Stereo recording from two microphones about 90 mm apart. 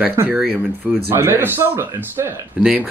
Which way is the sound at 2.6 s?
10° right (ahead or behind).